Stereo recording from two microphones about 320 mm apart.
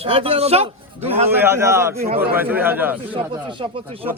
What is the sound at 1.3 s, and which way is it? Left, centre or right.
A man's voice, centre.